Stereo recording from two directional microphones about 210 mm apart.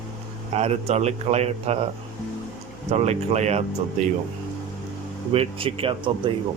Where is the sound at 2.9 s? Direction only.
30° right (ahead or behind).